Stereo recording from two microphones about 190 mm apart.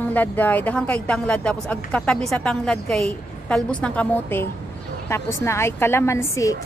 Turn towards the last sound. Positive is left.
turn(degrees=15)  # may be behind; listen again after turning